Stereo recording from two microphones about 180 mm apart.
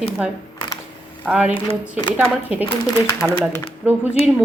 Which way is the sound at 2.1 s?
10° right (ahead or behind).